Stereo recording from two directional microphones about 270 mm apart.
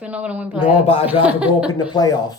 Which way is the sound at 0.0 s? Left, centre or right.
Centre.